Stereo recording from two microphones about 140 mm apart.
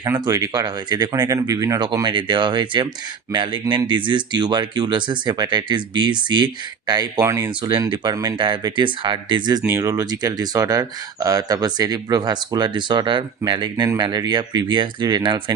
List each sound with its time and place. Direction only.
0.0 s speech: 25° right (ahead or behind)
9.6 s speech: 20° right (ahead or behind)